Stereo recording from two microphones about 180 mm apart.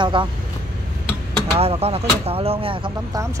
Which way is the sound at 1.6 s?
35° right (ahead or behind).